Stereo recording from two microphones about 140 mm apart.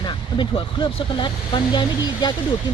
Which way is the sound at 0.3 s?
35° left (ahead or behind).